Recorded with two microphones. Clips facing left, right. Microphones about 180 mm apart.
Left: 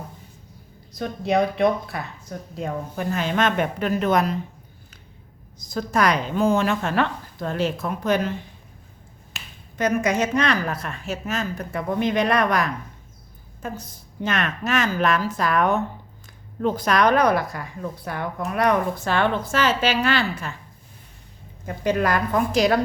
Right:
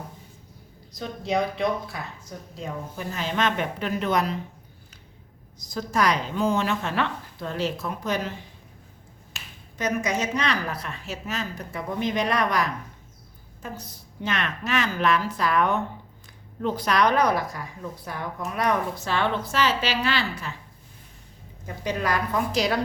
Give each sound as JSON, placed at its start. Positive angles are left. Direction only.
{"t": 0.9, "sound": "a woman's voice", "side_deg": 55}
{"t": 5.5, "sound": "a woman's voice", "side_deg": 55}
{"t": 9.3, "sound": "speech", "side_deg": 55}
{"t": 14.3, "sound": "a woman's voice", "side_deg": 45}
{"t": 21.8, "sound": "a woman's voice", "side_deg": 50}